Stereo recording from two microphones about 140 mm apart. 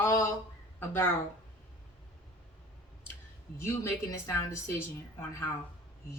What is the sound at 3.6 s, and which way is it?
Speech, 20° left (ahead or behind).